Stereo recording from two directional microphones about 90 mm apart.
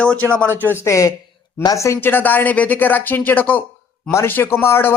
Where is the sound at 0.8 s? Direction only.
35° left (ahead or behind).